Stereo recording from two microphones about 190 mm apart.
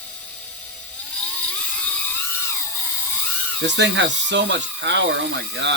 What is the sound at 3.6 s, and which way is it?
Speech, 70° right (ahead or behind).